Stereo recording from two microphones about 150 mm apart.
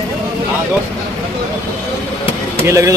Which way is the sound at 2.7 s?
20° right (ahead or behind).